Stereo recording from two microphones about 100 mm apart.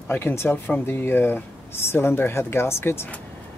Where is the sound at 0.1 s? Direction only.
25° left (ahead or behind).